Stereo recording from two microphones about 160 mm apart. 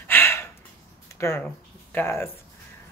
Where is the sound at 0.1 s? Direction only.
15° left (ahead or behind).